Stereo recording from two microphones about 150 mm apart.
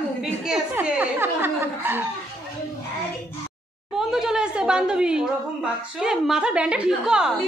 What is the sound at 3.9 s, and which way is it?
A woman's voice, 5° right (ahead or behind).